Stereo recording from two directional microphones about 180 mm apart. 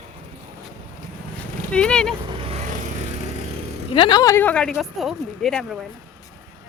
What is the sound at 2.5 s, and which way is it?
Vehicle, 40° right (ahead or behind).